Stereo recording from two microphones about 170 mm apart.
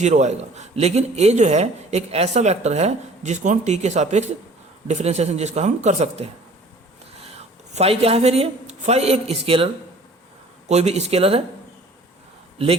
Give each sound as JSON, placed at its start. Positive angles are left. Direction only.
{"t": 0.0, "sound": "a man's voice", "side_deg": -45}
{"t": 10.7, "sound": "a man's voice", "side_deg": -40}